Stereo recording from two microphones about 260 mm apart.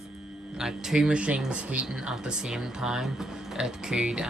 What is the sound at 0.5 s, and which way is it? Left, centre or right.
Speech, centre.